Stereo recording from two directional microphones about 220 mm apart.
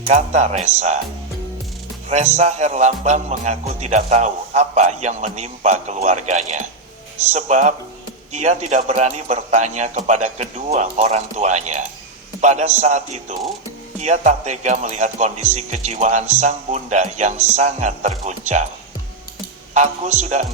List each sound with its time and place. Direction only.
0.1 s music: 30° right (ahead or behind)
2.0 s music: 30° right (ahead or behind)
19.7 s music: 30° right (ahead or behind)